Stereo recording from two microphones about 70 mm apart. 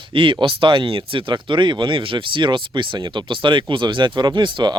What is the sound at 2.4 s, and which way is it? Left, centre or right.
Speech, right.